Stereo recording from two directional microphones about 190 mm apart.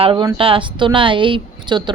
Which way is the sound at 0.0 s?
25° right (ahead or behind).